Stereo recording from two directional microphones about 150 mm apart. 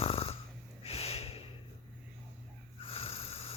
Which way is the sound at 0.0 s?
40° left (ahead or behind).